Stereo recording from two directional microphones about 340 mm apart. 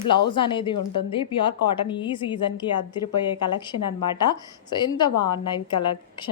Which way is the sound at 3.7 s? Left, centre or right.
Left.